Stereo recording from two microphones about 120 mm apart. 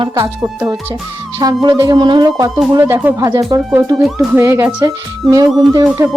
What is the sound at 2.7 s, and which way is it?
Speech, 20° right (ahead or behind).